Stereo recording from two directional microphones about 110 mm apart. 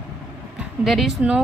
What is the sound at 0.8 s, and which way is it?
Speech, centre (ahead or behind).